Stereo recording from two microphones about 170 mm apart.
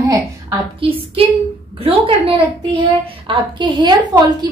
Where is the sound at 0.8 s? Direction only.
30° right (ahead or behind).